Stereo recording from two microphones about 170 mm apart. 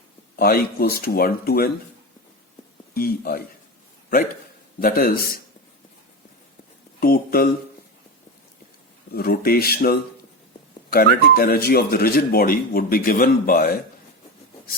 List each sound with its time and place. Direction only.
0.3 s speech: 60° left (ahead or behind)
2.9 s speech: 60° left (ahead or behind)
4.8 s speech: 60° left (ahead or behind)
7.0 s speech: 60° left (ahead or behind)
9.1 s speech: 65° left (ahead or behind)